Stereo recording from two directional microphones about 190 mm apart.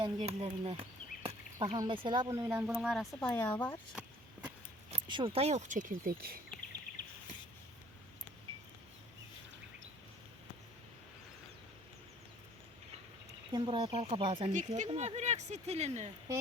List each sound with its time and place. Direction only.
0.0 s speech: 30° right (ahead or behind); by 3.8 s 10° left (ahead or behind)
3.9 s vehicle: 5° right (ahead or behind)
4.9 s speech: 25° right (ahead or behind); by 6.4 s 50° right (ahead or behind)
13.5 s speech: 30° right (ahead or behind)
14.5 s speech: 40° right (ahead or behind)